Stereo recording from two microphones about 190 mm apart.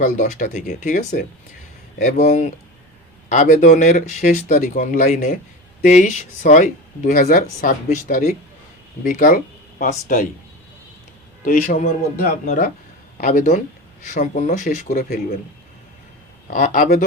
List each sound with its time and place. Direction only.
0.0 s speech: 45° left (ahead or behind)
11.4 s speech: 45° left (ahead or behind)
16.5 s speech: 45° left (ahead or behind)